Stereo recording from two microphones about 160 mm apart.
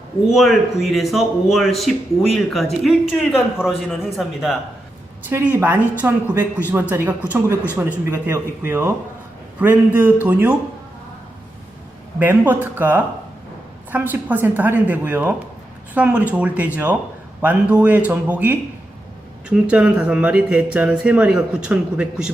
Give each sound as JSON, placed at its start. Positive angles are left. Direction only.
{"t": 0.3, "sound": "a man's voice", "side_deg": 0}
{"t": 5.2, "sound": "speech", "side_deg": -10}
{"t": 12.2, "sound": "speech", "side_deg": -10}